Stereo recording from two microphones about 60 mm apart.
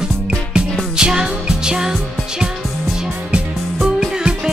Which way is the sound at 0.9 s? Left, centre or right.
Centre.